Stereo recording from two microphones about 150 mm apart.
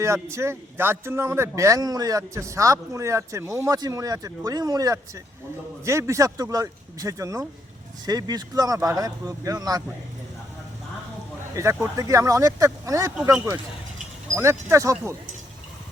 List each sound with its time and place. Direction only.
0.0 s speech: 20° right (ahead or behind)
11.5 s speech: 20° right (ahead or behind)